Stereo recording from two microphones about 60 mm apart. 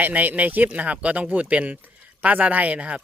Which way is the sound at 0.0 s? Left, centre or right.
Right.